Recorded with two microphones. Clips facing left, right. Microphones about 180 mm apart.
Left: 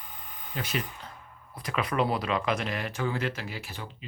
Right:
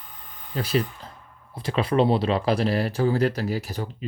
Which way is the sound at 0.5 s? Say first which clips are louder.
Right 9 dB; 35° right (ahead or behind).